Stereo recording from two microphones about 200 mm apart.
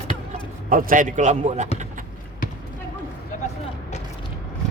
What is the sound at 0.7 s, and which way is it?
Speech, 45° right (ahead or behind).